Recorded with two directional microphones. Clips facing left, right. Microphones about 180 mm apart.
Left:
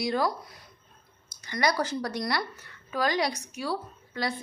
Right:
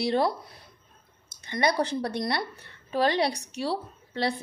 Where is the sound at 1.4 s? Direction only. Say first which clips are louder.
Right 2 dB; 25° right (ahead or behind).